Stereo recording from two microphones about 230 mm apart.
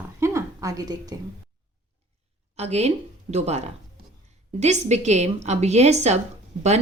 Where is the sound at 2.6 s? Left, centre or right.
Right.